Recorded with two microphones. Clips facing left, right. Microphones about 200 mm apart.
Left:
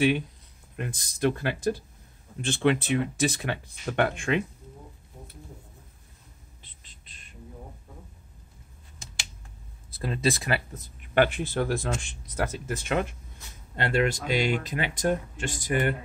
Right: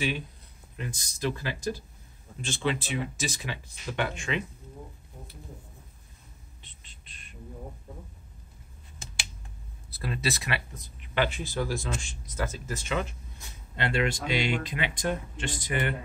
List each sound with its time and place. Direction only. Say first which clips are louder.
0.7 s speech: left 4 dB; 55° left (ahead or behind)
10.0 s speech: left 5 dB; 30° left (ahead or behind); by 13.1 s 55° left (ahead or behind)
13.7 s speech: left 3 dB; 45° left (ahead or behind)